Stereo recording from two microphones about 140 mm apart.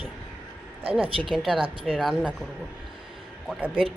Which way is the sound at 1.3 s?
Centre (ahead or behind).